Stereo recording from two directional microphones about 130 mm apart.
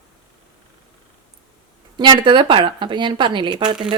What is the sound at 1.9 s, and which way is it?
Speech, 35° right (ahead or behind).